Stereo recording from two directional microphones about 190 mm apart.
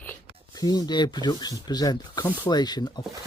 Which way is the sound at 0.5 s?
20° left (ahead or behind).